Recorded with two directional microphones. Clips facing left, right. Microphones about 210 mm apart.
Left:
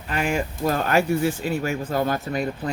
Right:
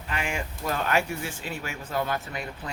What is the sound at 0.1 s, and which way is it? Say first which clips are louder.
Speech: left 7 dB; 40° left (ahead or behind).